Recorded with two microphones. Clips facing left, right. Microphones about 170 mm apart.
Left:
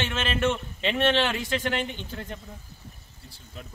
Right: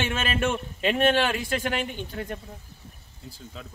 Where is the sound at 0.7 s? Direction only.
45° right (ahead or behind).